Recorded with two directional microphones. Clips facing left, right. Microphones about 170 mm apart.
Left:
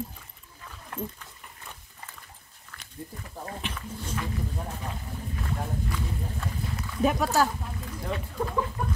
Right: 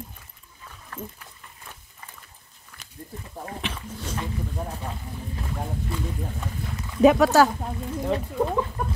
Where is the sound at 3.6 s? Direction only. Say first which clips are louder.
Right 3 dB; 90° right.